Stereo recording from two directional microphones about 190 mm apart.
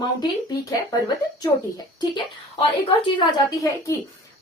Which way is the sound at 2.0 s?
25° left (ahead or behind).